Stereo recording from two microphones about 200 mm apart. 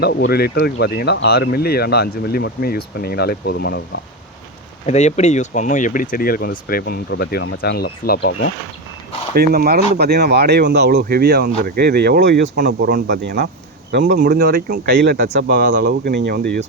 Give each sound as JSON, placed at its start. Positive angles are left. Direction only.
{"t": 0.0, "sound": "speech", "side_deg": 55}
{"t": 4.9, "sound": "speech", "side_deg": 35}
{"t": 9.3, "sound": "speech", "side_deg": -50}